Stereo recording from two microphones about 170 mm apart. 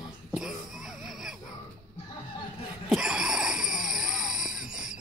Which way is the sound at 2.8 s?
5° right (ahead or behind).